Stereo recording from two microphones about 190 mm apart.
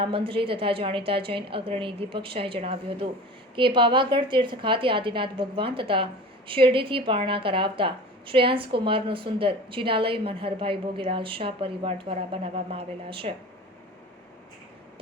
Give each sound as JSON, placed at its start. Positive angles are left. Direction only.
{"t": 0.0, "sound": "a woman's voice", "side_deg": -30}